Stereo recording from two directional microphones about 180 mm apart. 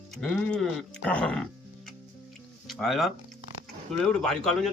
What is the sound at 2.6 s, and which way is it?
Speech, centre (ahead or behind).